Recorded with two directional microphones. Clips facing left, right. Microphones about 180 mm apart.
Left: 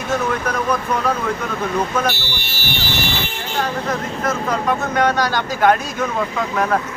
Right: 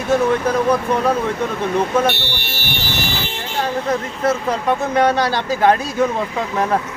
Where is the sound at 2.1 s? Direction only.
60° right (ahead or behind).